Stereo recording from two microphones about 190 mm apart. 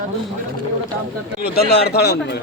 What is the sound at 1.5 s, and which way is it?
Speech, 60° left (ahead or behind).